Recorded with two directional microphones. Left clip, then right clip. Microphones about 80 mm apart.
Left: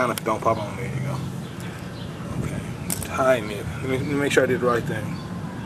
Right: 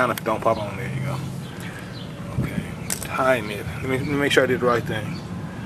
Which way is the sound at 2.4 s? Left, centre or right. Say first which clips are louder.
Right 1 dB; centre.